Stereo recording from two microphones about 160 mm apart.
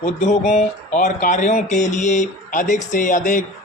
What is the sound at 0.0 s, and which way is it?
Speech, 45° left (ahead or behind).